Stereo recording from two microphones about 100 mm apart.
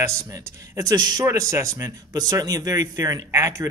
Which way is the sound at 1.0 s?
45° right (ahead or behind).